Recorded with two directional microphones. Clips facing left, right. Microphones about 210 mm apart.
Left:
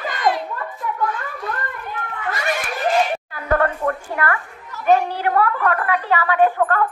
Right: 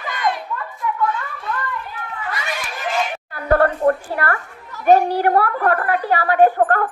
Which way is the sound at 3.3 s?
35° right (ahead or behind).